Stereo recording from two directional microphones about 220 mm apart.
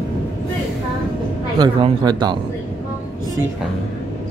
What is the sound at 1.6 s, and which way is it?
Speech, 20° right (ahead or behind).